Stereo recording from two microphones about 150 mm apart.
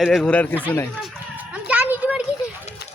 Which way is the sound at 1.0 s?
10° right (ahead or behind).